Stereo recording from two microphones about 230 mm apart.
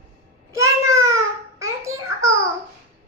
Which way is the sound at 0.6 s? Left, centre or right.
Centre.